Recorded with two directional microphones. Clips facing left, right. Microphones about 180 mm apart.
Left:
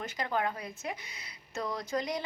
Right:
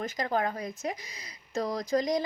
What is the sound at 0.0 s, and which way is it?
Speech, 40° right (ahead or behind).